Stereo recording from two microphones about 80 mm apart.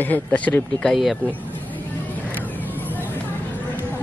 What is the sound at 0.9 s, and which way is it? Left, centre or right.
Speech, centre.